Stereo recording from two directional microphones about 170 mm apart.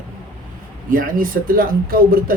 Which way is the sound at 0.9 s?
55° right (ahead or behind).